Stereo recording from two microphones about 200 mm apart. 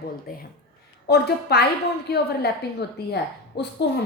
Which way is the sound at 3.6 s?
55° left (ahead or behind).